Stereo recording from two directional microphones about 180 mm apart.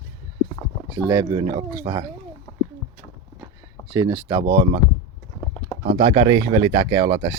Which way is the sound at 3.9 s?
20° right (ahead or behind).